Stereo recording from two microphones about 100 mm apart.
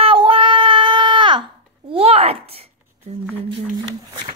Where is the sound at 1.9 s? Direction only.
70° right (ahead or behind).